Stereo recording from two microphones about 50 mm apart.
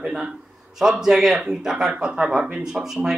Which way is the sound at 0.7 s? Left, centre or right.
Centre.